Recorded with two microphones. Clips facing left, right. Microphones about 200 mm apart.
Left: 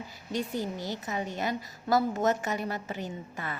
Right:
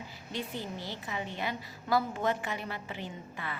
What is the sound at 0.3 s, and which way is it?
A woman's voice, 45° left (ahead or behind).